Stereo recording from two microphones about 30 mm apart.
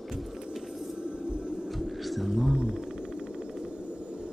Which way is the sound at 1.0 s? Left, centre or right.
Right.